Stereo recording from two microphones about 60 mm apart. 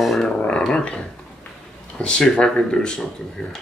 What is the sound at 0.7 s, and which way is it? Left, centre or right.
Speech, centre.